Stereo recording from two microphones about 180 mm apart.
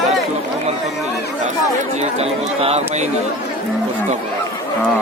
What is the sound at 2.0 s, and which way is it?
Speech, 35° right (ahead or behind).